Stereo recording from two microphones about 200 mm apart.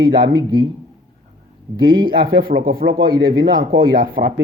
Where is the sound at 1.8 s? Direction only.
25° right (ahead or behind).